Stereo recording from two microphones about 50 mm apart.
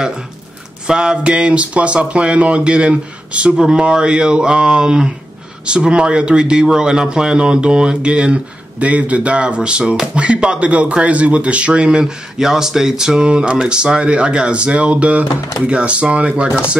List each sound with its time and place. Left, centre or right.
0.8 s speech: centre